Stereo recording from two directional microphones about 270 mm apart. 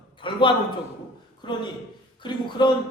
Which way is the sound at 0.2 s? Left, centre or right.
Centre.